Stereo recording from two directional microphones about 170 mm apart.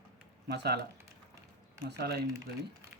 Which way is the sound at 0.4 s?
75° right (ahead or behind).